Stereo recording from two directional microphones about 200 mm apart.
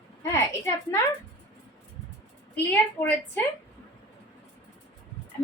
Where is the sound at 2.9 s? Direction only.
10° left (ahead or behind).